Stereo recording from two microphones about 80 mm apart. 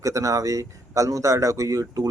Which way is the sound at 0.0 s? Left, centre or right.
Right.